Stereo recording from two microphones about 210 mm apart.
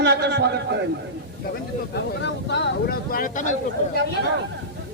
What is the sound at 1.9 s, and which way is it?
Speech, 55° left (ahead or behind).